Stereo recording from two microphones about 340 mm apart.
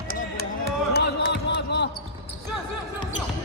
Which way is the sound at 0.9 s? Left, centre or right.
Left.